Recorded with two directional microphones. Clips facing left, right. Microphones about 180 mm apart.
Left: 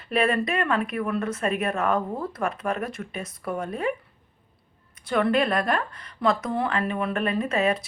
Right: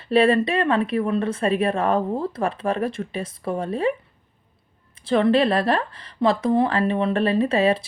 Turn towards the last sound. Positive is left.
turn(degrees=-30)  # may be behind; listen again after turning